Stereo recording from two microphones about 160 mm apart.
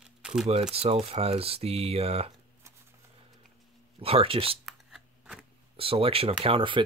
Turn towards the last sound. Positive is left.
turn(degrees=-35)  # may be behind; listen again after turning